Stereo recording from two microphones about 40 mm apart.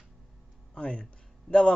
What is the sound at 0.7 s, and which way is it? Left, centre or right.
Speech, left.